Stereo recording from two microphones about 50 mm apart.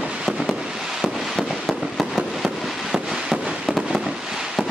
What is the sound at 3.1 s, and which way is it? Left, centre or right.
Firecracker, centre.